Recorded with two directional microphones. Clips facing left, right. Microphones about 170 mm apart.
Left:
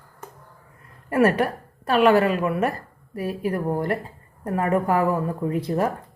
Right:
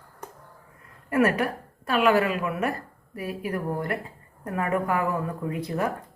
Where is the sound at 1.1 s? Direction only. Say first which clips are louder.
Left 3 dB; 35° left (ahead or behind).